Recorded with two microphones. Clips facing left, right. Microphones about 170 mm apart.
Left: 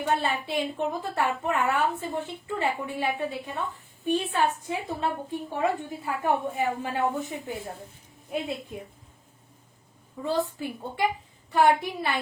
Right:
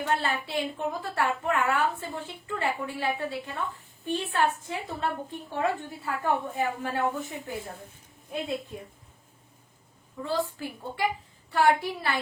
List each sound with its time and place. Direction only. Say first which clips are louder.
0.0 s a woman's voice: left 2 dB; 15° left (ahead or behind)
10.2 s a child's voice: left 2 dB; 20° left (ahead or behind)